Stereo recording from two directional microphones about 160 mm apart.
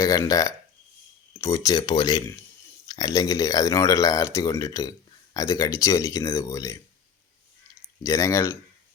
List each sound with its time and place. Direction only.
0.0 s speech: 20° left (ahead or behind)
8.0 s speech: 20° left (ahead or behind)